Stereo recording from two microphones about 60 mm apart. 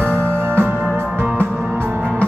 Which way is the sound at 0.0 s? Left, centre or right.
Right.